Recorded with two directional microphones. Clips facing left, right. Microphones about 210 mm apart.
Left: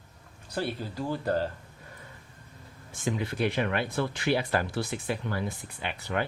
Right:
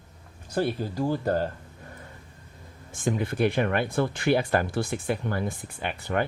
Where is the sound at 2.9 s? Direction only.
50° right (ahead or behind).